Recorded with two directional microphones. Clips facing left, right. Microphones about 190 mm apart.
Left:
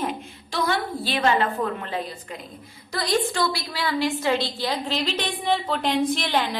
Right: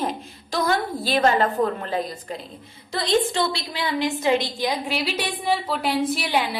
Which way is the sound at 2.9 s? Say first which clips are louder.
Right 2 dB; 25° right (ahead or behind).